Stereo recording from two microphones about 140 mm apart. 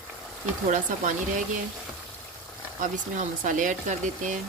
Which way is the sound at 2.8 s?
65° right (ahead or behind).